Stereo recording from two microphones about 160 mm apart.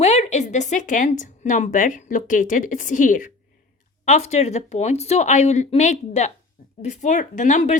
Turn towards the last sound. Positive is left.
turn(degrees=50)  # may be behind; listen again after turning